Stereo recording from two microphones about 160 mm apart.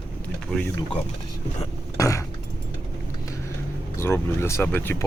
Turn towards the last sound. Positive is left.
turn(degrees=15)  # may be behind; listen again after turning